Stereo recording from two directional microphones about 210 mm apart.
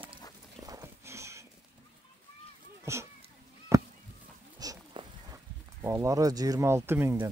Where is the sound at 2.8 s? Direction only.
15° right (ahead or behind).